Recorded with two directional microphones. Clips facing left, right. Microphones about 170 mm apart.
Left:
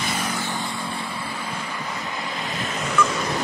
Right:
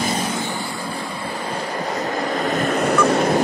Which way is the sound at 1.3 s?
35° right (ahead or behind).